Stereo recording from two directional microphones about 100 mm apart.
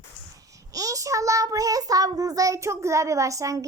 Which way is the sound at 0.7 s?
35° right (ahead or behind).